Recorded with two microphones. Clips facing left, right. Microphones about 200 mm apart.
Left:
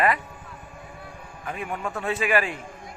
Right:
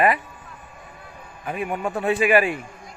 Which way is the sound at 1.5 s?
15° right (ahead or behind).